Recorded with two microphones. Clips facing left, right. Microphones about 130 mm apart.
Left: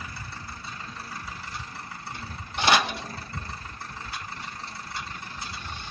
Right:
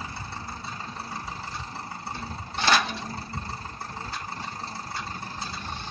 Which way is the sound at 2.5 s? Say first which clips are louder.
Left 1 dB; 20° left (ahead or behind).